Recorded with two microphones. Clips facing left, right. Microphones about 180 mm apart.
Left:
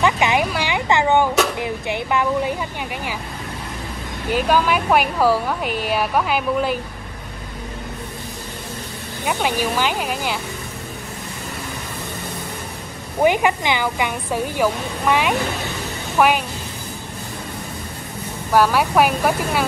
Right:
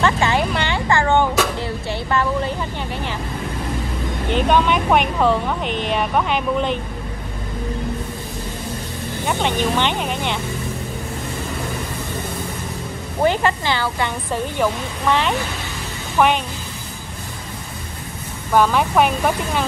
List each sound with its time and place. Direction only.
0.0 s a woman's voice: 15° left (ahead or behind)
0.5 s a sound: 10° left (ahead or behind)
4.3 s speech: 5° left (ahead or behind)
9.2 s speech: 5° left (ahead or behind)
13.2 s a woman's voice: 10° left (ahead or behind)
18.5 s a woman's voice: 5° left (ahead or behind)